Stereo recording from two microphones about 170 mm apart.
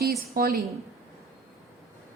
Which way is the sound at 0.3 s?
65° right (ahead or behind).